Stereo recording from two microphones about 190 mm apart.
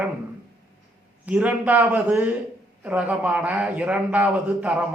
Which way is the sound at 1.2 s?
5° right (ahead or behind).